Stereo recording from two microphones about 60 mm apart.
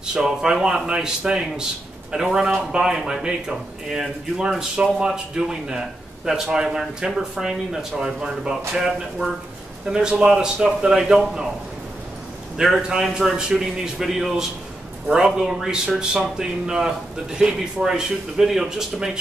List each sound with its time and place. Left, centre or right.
0.0 s speech: centre
12.5 s a man's voice: centre